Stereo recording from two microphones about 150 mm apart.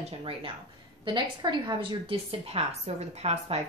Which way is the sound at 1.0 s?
30° right (ahead or behind).